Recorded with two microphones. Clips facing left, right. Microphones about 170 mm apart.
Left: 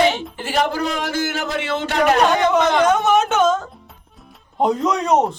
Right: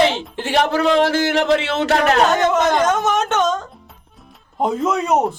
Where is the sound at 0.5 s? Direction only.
75° right (ahead or behind).